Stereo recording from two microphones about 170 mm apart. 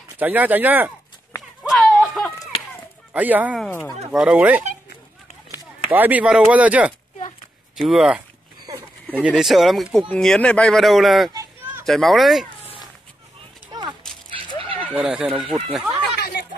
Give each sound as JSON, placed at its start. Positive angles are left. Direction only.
{"t": 0.2, "sound": "speech", "side_deg": -10}
{"t": 1.7, "sound": "a sound", "side_deg": 0}
{"t": 3.1, "sound": "speech", "side_deg": -10}
{"t": 5.9, "sound": "speech", "side_deg": -10}
{"t": 9.2, "sound": "speech", "side_deg": 0}
{"t": 13.7, "sound": "horse", "side_deg": -25}
{"t": 14.6, "sound": "a sound", "side_deg": -30}
{"t": 15.0, "sound": "speech", "side_deg": -5}
{"t": 16.2, "sound": "chatter", "side_deg": 65}